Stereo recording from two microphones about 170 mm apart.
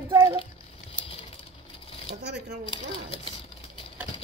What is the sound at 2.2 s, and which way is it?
Speech, 80° right.